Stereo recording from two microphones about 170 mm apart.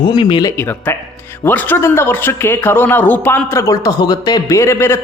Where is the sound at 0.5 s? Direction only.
15° left (ahead or behind).